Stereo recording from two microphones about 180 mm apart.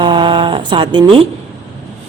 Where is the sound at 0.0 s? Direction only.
25° right (ahead or behind).